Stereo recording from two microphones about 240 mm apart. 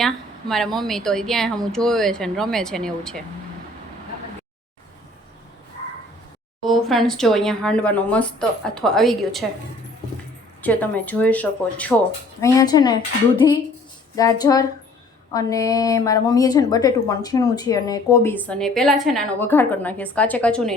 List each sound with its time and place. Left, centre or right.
0.0 s a woman's voice: centre
6.7 s a woman's voice: centre
10.6 s a woman's voice: centre